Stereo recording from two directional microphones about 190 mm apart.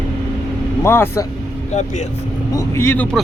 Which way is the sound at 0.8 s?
15° left (ahead or behind).